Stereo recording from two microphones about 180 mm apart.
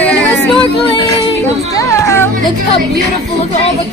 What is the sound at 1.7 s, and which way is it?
Children playing, 15° left (ahead or behind).